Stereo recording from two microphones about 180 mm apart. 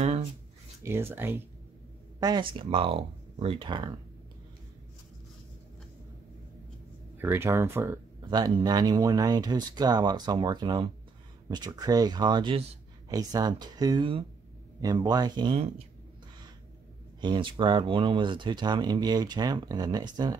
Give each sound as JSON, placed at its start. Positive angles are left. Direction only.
{"t": 0.0, "sound": "a sound", "side_deg": -35}
{"t": 0.8, "sound": "speech", "side_deg": -15}
{"t": 2.1, "sound": "speech", "side_deg": -20}
{"t": 7.2, "sound": "speech", "side_deg": -15}
{"t": 17.2, "sound": "speech", "side_deg": -25}